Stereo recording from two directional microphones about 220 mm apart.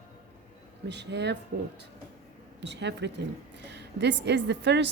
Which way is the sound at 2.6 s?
50° right (ahead or behind).